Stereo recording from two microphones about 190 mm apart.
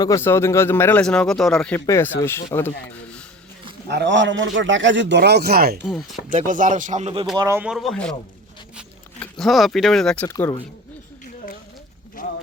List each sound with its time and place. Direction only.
0.0 s a man's voice: 15° left (ahead or behind)
3.8 s a man's voice: 65° right (ahead or behind)
5.8 s speech: centre (ahead or behind)
6.3 s speech: 45° right (ahead or behind)
7.3 s speech: 15° right (ahead or behind)
7.6 s speech: centre (ahead or behind)
9.2 s speech: centre (ahead or behind)
10.2 s a man's voice: 15° left (ahead or behind)
12.2 s clip-clop: 45° left (ahead or behind)